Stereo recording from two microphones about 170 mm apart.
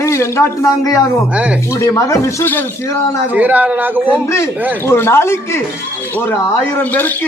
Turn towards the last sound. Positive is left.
turn(degrees=10)  # may be behind; listen again after turning